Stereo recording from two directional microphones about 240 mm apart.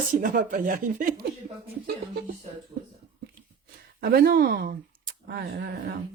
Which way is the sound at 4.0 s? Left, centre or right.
Right.